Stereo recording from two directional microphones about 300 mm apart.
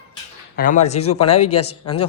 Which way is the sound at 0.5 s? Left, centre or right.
Left.